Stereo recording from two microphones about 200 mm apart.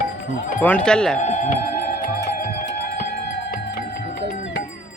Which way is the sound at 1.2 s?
35° left (ahead or behind).